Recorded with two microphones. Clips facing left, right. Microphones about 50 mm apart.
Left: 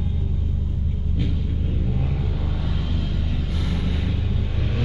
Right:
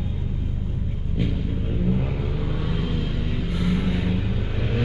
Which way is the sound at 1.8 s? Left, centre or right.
Centre.